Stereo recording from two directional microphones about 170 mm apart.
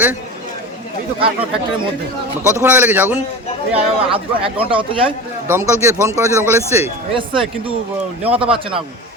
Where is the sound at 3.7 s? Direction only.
30° right (ahead or behind).